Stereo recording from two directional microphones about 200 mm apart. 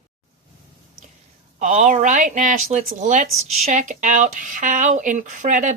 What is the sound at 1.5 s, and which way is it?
A woman's voice, 40° right (ahead or behind).